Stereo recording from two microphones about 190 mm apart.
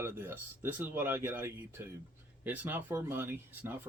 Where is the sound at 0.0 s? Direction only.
10° right (ahead or behind).